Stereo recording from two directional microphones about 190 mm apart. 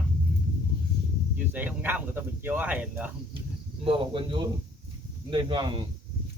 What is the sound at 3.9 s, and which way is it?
Speech, 25° right (ahead or behind).